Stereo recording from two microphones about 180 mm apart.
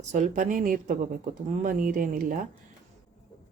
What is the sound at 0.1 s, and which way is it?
A woman's voice, 45° right (ahead or behind).